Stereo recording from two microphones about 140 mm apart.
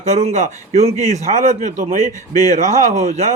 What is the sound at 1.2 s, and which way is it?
Speech, 65° right (ahead or behind).